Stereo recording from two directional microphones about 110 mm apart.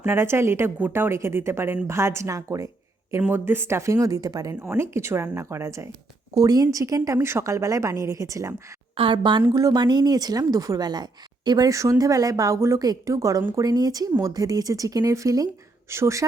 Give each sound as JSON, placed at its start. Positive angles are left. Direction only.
{"t": 0.0, "sound": "a woman's voice", "side_deg": -20}
{"t": 3.2, "sound": "a woman's voice", "side_deg": -20}
{"t": 4.7, "sound": "a woman's voice", "side_deg": -25}
{"t": 9.0, "sound": "a woman's voice", "side_deg": -45}